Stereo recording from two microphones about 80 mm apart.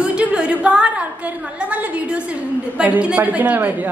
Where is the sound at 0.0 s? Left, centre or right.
Centre.